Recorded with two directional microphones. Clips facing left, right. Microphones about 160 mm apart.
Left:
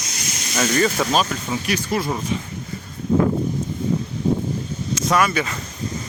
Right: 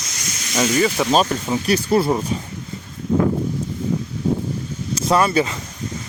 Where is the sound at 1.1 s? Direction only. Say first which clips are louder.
Right 4 dB; 35° right (ahead or behind).